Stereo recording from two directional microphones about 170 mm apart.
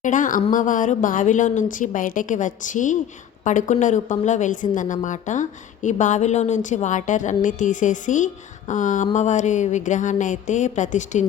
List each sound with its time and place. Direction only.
0.0 s a woman's voice: 50° left (ahead or behind)